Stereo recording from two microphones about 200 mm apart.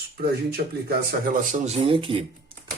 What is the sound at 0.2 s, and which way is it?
Speech, 50° right (ahead or behind).